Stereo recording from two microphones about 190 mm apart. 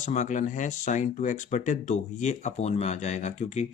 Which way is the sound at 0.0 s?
40° left (ahead or behind).